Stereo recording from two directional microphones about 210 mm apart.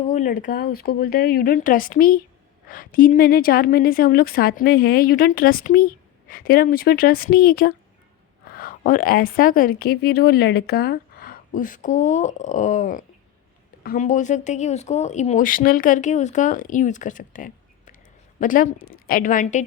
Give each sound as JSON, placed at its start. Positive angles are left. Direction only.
{"t": 0.0, "sound": "a woman's voice", "side_deg": 40}